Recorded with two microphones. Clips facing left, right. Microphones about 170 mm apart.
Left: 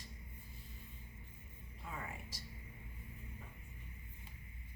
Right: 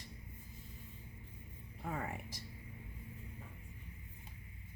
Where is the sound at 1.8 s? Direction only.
60° right (ahead or behind).